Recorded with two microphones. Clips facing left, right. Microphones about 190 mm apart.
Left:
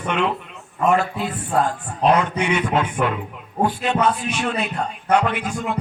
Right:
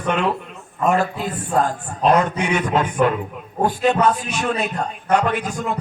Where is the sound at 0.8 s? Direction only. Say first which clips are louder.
Even; 45° right (ahead or behind).